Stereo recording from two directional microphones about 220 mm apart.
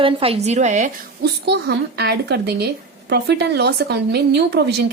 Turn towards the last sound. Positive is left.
turn(degrees=-50)  # may be behind; listen again after turning